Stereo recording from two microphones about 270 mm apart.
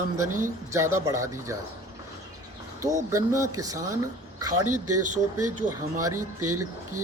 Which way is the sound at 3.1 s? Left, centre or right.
Centre.